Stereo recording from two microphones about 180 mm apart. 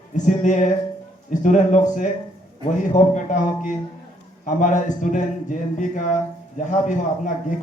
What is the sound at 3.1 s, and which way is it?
Speech, 45° left (ahead or behind).